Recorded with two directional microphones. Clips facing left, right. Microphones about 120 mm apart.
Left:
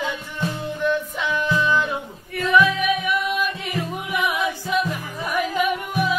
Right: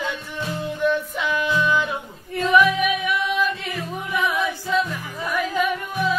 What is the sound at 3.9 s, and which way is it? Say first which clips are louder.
Music: right 3 dB; 15° left (ahead or behind).